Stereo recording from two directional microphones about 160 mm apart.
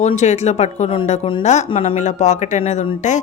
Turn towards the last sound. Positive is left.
turn(degrees=50)  # may be behind; listen again after turning